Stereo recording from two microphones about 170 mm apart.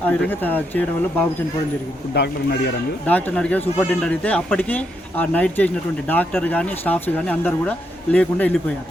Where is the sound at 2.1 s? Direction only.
75° left (ahead or behind).